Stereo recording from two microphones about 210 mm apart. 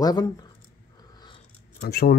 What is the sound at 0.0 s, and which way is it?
Speech, 20° left (ahead or behind).